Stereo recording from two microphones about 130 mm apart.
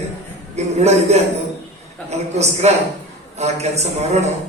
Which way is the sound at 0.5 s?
60° right (ahead or behind).